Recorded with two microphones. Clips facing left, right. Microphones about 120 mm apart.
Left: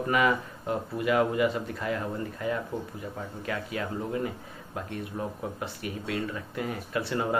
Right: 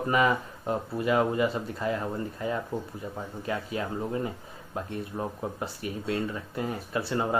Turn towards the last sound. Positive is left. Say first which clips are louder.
# right 1 dB
turn(degrees=-30)  # may be behind; listen again after turning